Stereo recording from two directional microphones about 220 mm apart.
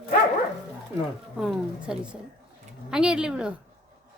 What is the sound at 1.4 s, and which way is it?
A woman's voice, 5° right (ahead or behind).